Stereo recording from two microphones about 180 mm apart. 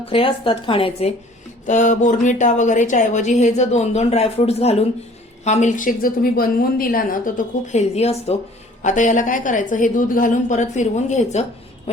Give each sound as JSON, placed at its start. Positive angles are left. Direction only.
{"t": 0.0, "sound": "speech", "side_deg": 30}
{"t": 1.6, "sound": "a woman's voice", "side_deg": 45}